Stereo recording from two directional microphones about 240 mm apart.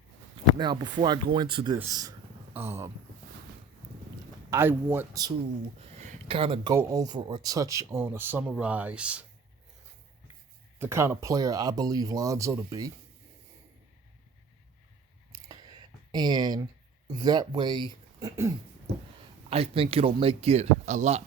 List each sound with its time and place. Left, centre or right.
0.6 s speech: centre
4.5 s speech: centre
6.0 s a sound: right
6.7 s speech: centre
10.8 s speech: centre
15.4 s clicking: centre
17.1 s speech: centre
19.5 s speech: right